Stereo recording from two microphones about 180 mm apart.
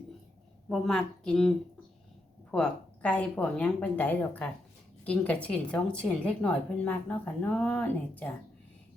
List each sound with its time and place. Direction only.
0.7 s speech: 5° left (ahead or behind)